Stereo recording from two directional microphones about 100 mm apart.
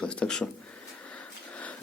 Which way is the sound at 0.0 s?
10° left (ahead or behind).